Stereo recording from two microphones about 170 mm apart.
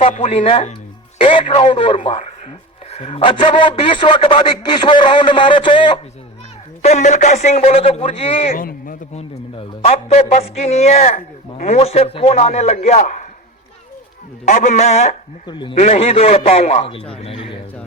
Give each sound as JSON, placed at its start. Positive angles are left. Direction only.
{"t": 0.0, "sound": "a man's voice", "side_deg": 40}
{"t": 2.1, "sound": "a man's voice", "side_deg": 40}
{"t": 6.8, "sound": "a man's voice", "side_deg": 45}
{"t": 8.5, "sound": "a man's voice", "side_deg": 55}
{"t": 9.1, "sound": "a man's voice", "side_deg": 35}
{"t": 14.4, "sound": "a man's voice", "side_deg": 45}
{"t": 15.4, "sound": "a man's voice", "side_deg": 30}